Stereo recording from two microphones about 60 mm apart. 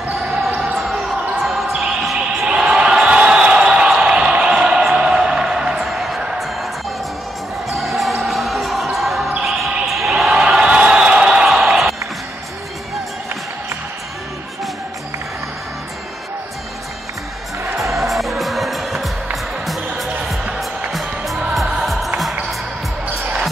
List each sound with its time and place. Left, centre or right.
0.7 s basketball bounce: centre
2.4 s a sound: centre
7.7 s music: centre
8.9 s basketball bounce: centre
9.8 s a sound: centre
17.9 s music: centre